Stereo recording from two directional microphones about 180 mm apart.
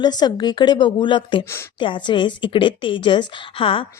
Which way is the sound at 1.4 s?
15° left (ahead or behind).